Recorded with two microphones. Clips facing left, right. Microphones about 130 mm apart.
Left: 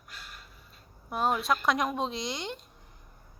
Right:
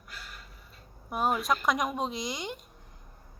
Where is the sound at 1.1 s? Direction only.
5° right (ahead or behind).